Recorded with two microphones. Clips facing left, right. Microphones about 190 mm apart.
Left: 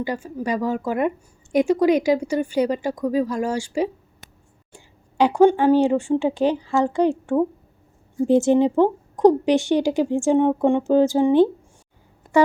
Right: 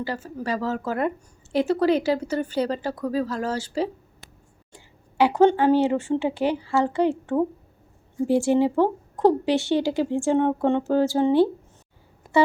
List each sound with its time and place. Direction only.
0.0 s speech: 15° left (ahead or behind)